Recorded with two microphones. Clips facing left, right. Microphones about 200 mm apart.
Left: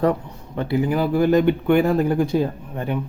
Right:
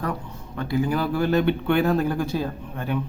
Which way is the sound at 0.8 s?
15° left (ahead or behind).